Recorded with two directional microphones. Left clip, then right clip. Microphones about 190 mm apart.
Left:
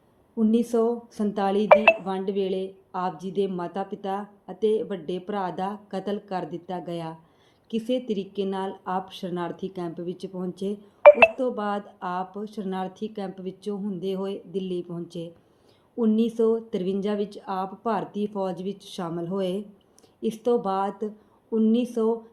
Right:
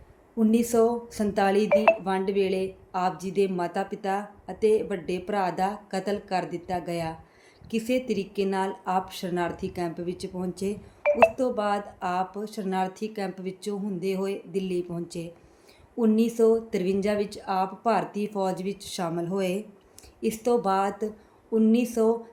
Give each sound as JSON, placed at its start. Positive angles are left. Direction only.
{"t": 0.3, "sound": "a woman's voice", "side_deg": -15}